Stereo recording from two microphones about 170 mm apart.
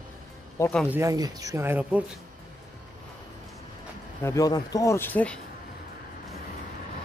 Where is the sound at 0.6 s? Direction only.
15° left (ahead or behind).